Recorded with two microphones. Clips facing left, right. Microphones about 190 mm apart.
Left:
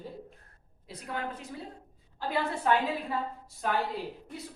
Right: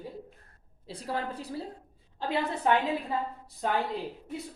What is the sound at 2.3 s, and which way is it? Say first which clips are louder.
Speech: right 1 dB; 20° right (ahead or behind).